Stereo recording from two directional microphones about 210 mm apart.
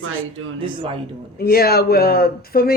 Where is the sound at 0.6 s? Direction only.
25° right (ahead or behind).